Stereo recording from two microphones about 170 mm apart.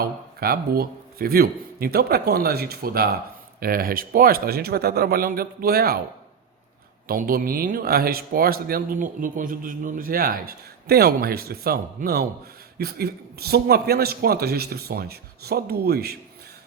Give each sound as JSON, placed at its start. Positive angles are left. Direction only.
{"t": 0.0, "sound": "a man's voice", "side_deg": -65}
{"t": 7.1, "sound": "a man's voice", "side_deg": -60}